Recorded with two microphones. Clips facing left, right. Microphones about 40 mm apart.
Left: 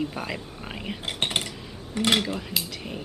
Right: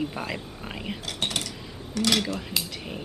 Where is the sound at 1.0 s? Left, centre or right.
Left.